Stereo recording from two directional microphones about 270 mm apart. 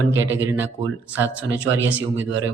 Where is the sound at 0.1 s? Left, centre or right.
Centre.